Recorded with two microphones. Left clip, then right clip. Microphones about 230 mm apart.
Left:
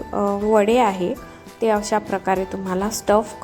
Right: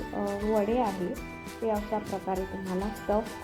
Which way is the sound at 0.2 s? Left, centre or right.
Left.